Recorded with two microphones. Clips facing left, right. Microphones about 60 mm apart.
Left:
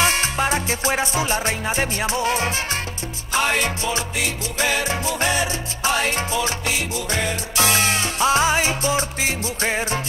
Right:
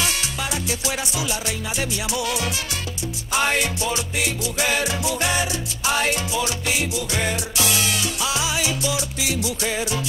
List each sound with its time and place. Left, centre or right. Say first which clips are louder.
0.0 s music: left 6 dB; left
4.6 s salsa music: left 2 dB; left
7.1 s salsa music: left 1 dB; left